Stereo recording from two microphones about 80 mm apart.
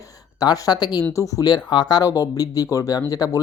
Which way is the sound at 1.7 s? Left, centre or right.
Left.